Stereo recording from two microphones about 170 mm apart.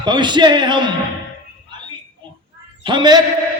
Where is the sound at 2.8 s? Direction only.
25° right (ahead or behind).